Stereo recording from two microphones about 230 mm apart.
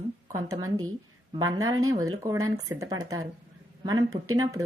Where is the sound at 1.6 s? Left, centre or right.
Right.